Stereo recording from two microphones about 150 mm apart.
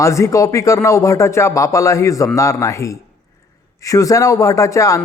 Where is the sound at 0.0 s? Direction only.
20° left (ahead or behind).